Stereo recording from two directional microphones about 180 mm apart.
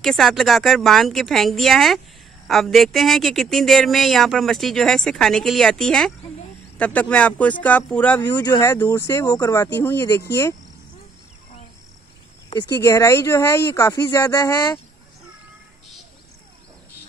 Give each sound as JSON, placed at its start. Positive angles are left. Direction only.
{"t": 0.0, "sound": "speech", "side_deg": 0}
{"t": 8.3, "sound": "speech", "side_deg": 20}
{"t": 12.4, "sound": "speech", "side_deg": 20}